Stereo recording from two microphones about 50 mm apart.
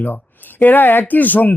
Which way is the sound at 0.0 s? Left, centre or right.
Left.